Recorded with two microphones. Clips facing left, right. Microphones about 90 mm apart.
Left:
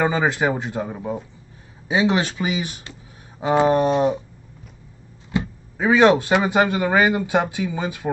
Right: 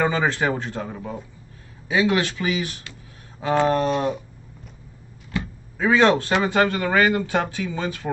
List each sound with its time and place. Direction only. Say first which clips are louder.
0.0 s speech: left 2 dB; 15° left (ahead or behind)
5.3 s speech: left 4 dB; 20° left (ahead or behind)